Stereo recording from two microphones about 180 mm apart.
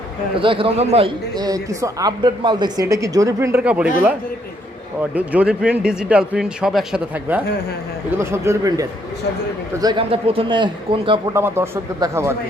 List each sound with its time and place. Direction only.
0.3 s a woman's voice: 30° right (ahead or behind)
1.3 s a woman's voice: 20° right (ahead or behind)
5.1 s a woman's voice: 10° right (ahead or behind); by 11.2 s 25° right (ahead or behind)
11.3 s speech: 15° right (ahead or behind)